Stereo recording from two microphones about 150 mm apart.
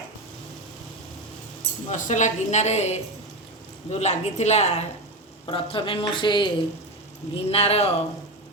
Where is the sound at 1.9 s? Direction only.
55° left (ahead or behind).